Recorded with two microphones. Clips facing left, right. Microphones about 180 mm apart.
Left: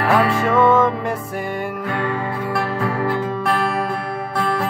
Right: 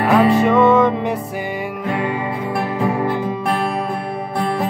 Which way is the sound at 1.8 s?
20° right (ahead or behind).